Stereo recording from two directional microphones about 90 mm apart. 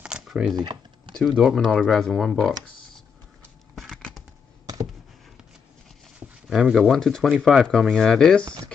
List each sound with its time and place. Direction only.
0.3 s speech: centre (ahead or behind)
0.6 s computer keyboard: 60° right (ahead or behind)
1.1 s speech: centre (ahead or behind)
3.7 s a sound: 5° left (ahead or behind)
6.5 s speech: 5° right (ahead or behind)